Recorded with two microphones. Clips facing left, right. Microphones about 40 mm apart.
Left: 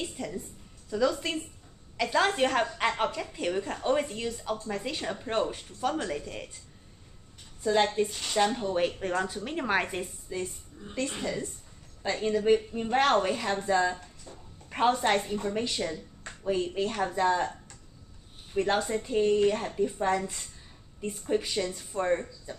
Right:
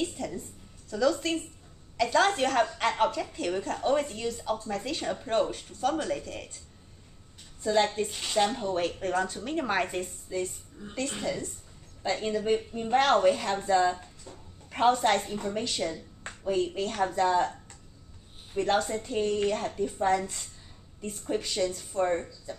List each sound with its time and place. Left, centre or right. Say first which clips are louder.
0.3 s a woman's voice: left 1 dB; centre
7.7 s a woman's voice: even; centre
8.1 s speech: even; centre
8.4 s a woman's voice: left 1 dB; centre